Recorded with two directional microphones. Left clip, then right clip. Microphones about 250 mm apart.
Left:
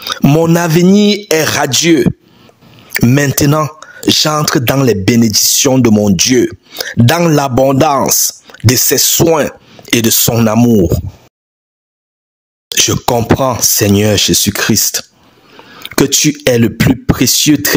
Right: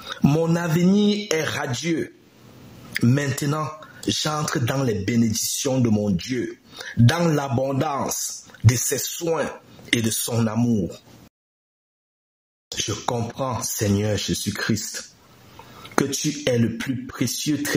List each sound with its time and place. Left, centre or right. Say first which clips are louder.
0.0 s speech: left 12 dB; left
3.0 s speech: left 12 dB; left
12.7 s speech: left 15 dB; left